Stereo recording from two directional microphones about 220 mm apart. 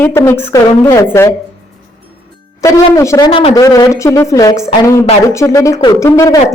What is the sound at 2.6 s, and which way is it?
Speech, 15° left (ahead or behind).